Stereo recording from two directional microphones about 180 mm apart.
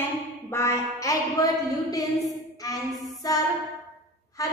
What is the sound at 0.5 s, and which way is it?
A woman's voice, 15° left (ahead or behind).